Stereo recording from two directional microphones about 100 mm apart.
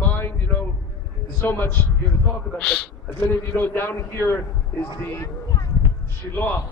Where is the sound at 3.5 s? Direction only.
20° left (ahead or behind).